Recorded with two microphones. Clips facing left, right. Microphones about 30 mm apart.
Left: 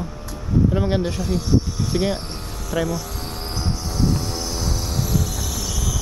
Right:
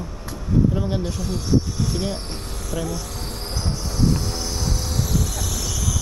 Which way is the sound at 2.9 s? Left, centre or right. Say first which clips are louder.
Left 3 dB; centre.